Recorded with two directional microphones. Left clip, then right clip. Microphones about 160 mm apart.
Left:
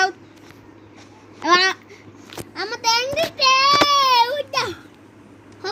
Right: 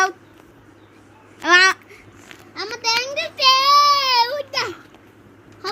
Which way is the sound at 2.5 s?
60° left (ahead or behind).